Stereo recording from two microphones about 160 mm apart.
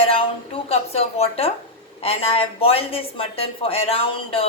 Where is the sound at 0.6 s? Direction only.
40° left (ahead or behind).